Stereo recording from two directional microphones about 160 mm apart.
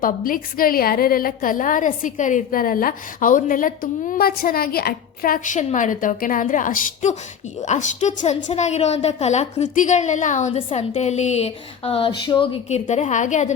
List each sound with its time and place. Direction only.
0.0 s a woman's voice: 60° left (ahead or behind)
4.1 s a woman's voice: 70° left (ahead or behind); by 12.5 s 30° left (ahead or behind)
12.7 s a woman's voice: 45° left (ahead or behind)